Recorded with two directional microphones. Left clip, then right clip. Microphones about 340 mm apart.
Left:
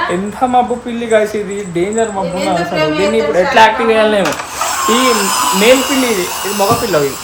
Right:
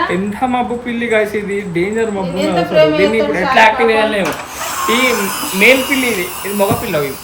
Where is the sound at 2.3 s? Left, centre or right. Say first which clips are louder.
Right 4 dB; centre.